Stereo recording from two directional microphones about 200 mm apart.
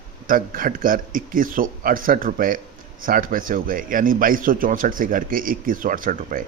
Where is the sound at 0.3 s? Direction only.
45° right (ahead or behind).